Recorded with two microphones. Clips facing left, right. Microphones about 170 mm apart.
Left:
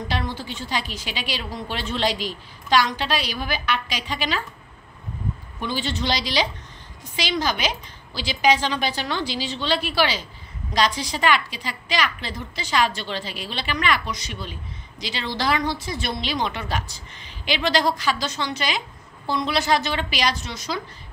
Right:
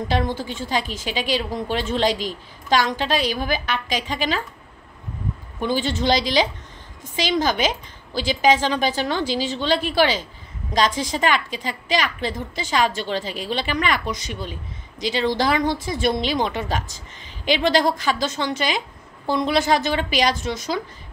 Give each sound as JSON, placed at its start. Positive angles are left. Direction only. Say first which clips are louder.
{"t": 0.1, "sound": "a woman's voice", "louder": "right 6 dB", "side_deg": -45}
{"t": 5.6, "sound": "a woman's voice", "louder": "right 5 dB", "side_deg": -45}